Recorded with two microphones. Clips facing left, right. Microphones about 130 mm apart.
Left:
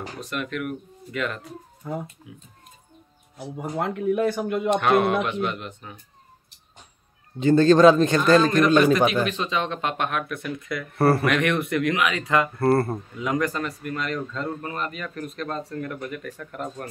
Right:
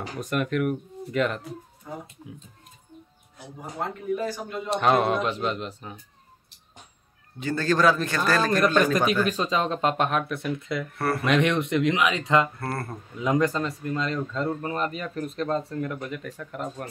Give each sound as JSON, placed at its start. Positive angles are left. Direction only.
{"t": 0.3, "sound": "speech", "side_deg": -45}
{"t": 1.8, "sound": "speech", "side_deg": 75}
{"t": 3.7, "sound": "speech", "side_deg": 70}
{"t": 4.6, "sound": "speech", "side_deg": -30}
{"t": 7.3, "sound": "a man's voice", "side_deg": 25}
{"t": 9.2, "sound": "speech", "side_deg": -40}
{"t": 11.0, "sound": "a man's voice", "side_deg": 30}
{"t": 11.2, "sound": "speech", "side_deg": -25}
{"t": 12.5, "sound": "speech", "side_deg": 30}
{"t": 13.2, "sound": "speech", "side_deg": -25}